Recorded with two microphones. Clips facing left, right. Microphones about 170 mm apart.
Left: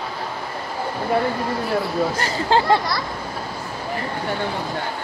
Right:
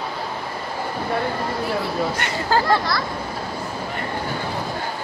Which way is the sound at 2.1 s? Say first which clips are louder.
Left 2 dB; 35° left (ahead or behind).